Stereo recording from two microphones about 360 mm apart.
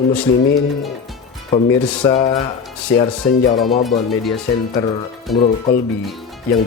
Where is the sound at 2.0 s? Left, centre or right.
Centre.